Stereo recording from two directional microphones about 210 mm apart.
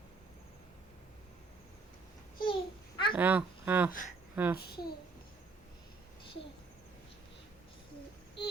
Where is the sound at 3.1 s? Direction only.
10° right (ahead or behind).